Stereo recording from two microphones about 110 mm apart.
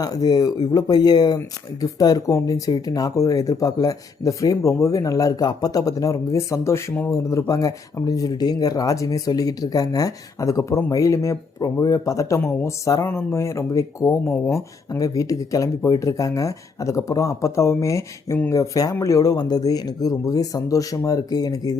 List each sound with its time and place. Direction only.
0.0 s speech: 35° left (ahead or behind)